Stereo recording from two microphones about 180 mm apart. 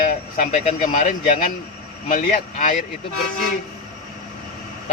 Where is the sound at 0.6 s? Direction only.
45° left (ahead or behind).